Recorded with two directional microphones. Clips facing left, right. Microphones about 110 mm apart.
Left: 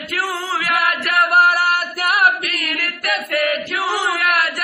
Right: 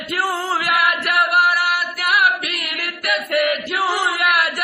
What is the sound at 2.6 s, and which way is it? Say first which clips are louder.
Chant: left 3 dB; 10° right (ahead or behind).